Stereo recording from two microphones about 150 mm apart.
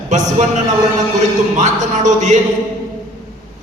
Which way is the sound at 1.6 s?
55° right (ahead or behind).